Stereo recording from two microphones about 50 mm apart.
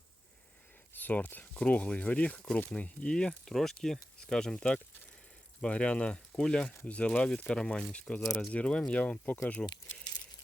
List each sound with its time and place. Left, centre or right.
0.9 s speech: left; by 8.5 s centre
8.5 s speech: left